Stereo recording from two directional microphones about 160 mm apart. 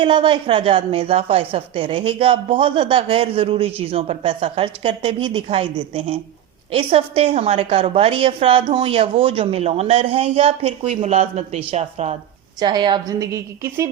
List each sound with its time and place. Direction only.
0.0 s a woman's voice: 30° right (ahead or behind)
12.5 s a woman's voice: 30° right (ahead or behind)